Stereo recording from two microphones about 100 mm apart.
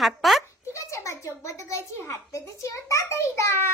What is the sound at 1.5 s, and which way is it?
A child's voice, 30° left (ahead or behind).